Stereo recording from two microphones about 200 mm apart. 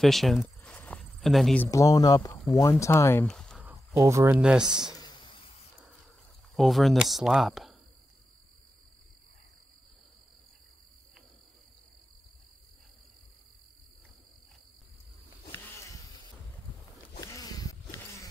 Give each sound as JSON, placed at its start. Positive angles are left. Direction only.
{"t": 0.0, "sound": "cricket", "side_deg": 0}
{"t": 1.7, "sound": "speech", "side_deg": 15}
{"t": 3.6, "sound": "speech", "side_deg": -10}
{"t": 4.9, "sound": "a sound", "side_deg": 20}
{"t": 6.5, "sound": "speech", "side_deg": 0}
{"t": 15.5, "sound": "a sound", "side_deg": 10}
{"t": 17.2, "sound": "insect", "side_deg": 20}